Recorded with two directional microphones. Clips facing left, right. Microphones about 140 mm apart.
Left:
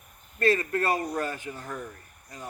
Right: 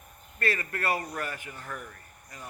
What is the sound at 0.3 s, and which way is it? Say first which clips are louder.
A man's voice: left 7 dB; 25° left (ahead or behind).